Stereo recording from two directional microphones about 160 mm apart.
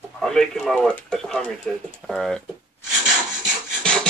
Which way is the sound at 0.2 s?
5° left (ahead or behind).